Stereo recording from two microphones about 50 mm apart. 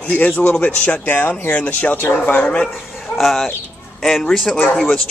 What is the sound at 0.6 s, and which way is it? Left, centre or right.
Speech, left.